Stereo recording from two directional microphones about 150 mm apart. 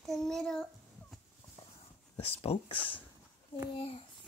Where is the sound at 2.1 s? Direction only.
40° left (ahead or behind).